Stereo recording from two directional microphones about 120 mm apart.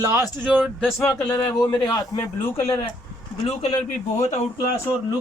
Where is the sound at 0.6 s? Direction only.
5° right (ahead or behind).